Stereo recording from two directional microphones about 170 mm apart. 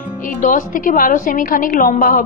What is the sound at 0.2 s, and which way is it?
A woman's voice, 50° left (ahead or behind).